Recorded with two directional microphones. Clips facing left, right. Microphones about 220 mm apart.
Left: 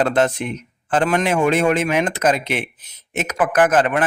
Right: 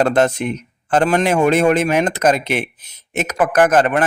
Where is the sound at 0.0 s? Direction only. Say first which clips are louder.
Right 3 dB; 45° right (ahead or behind).